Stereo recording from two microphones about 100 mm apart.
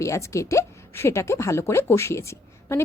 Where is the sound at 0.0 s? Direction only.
30° left (ahead or behind).